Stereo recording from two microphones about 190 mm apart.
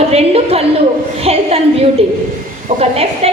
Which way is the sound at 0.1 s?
30° right (ahead or behind).